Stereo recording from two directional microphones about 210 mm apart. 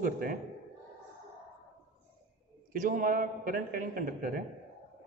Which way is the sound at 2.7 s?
40° right (ahead or behind).